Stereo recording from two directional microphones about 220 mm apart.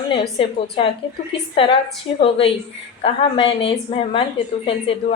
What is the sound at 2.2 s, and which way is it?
A woman's voice, 25° left (ahead or behind).